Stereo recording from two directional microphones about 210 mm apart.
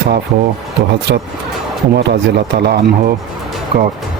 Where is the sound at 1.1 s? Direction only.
50° right (ahead or behind).